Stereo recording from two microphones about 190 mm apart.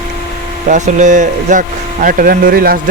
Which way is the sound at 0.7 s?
40° right (ahead or behind).